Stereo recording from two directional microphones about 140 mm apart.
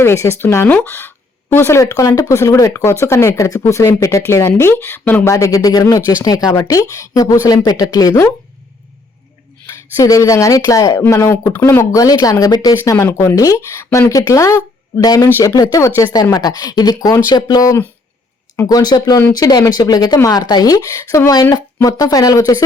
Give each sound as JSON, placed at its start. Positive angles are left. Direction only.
{"t": 0.0, "sound": "speech", "side_deg": 20}
{"t": 10.0, "sound": "speech", "side_deg": 25}
{"t": 18.8, "sound": "speech", "side_deg": 30}